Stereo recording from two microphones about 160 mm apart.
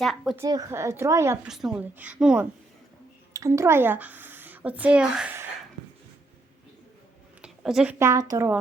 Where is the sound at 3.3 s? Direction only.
20° right (ahead or behind).